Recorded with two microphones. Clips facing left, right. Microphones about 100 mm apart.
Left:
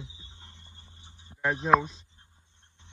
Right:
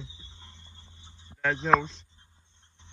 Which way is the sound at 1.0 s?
15° left (ahead or behind).